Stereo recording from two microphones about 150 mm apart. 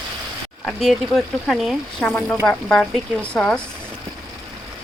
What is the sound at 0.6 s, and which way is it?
Speech, centre (ahead or behind).